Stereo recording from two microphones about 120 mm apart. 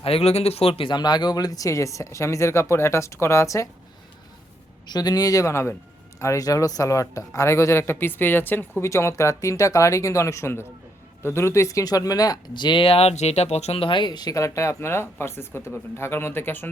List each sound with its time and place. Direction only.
0.0 s speech: 55° left (ahead or behind); by 3.7 s 25° left (ahead or behind)
4.9 s speech: 35° left (ahead or behind); by 16.6 s 20° left (ahead or behind)